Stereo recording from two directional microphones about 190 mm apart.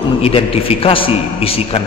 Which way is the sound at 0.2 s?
30° left (ahead or behind).